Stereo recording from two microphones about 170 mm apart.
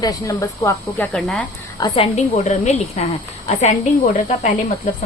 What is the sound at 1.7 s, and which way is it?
A woman's voice, 25° left (ahead or behind).